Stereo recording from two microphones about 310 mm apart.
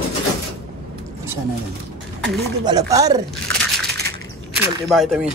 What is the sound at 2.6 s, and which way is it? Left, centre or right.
Speech, centre.